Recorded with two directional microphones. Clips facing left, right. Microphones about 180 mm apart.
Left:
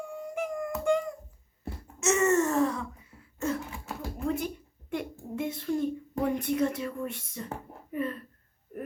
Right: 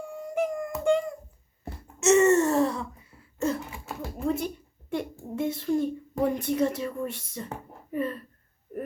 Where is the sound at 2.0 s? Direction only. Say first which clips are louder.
Right 5 dB; 30° right (ahead or behind).